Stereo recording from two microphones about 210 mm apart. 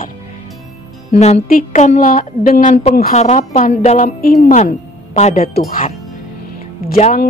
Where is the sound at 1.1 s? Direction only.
30° left (ahead or behind).